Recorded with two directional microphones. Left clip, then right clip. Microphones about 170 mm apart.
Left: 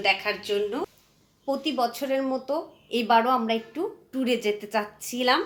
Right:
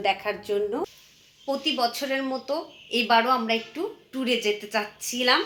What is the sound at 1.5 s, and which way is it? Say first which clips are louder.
Speech: even; 15° left (ahead or behind).